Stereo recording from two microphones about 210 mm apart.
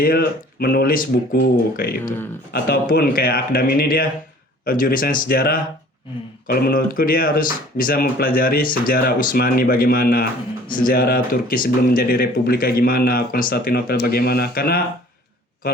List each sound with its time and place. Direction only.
0.0 s speech: 45° left (ahead or behind)